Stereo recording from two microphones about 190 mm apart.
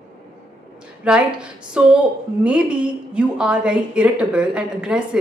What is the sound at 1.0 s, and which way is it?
A woman's voice, 5° right (ahead or behind).